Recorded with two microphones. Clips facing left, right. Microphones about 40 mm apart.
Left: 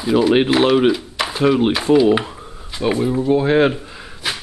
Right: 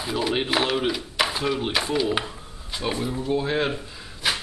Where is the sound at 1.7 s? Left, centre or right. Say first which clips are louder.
Left 10 dB; centre.